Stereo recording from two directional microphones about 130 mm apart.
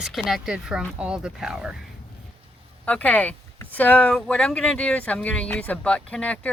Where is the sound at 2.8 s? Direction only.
10° left (ahead or behind).